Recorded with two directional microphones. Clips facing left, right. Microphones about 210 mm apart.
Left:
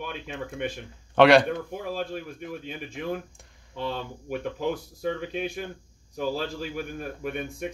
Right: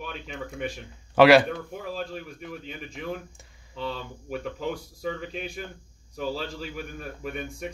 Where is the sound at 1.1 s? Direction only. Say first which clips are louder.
Right 1 dB; 5° right (ahead or behind).